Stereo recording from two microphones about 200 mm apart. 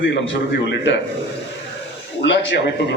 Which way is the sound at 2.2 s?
60° left (ahead or behind).